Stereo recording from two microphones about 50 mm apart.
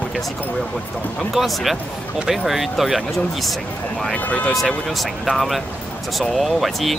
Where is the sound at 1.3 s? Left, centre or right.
Centre.